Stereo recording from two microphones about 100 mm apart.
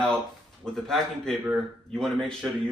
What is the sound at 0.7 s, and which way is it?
A man's voice, 5° left (ahead or behind).